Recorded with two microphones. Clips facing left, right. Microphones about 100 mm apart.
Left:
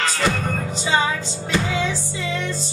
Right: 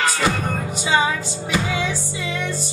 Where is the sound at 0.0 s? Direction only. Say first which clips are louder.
Right 1 dB; 15° right (ahead or behind).